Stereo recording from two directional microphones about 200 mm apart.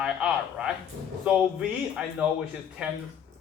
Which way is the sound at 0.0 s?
5° right (ahead or behind).